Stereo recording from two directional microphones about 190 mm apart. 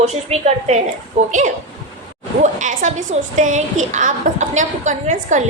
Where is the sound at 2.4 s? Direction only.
40° right (ahead or behind).